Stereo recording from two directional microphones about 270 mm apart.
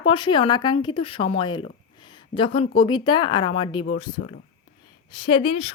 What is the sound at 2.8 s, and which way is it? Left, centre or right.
A woman's voice, centre.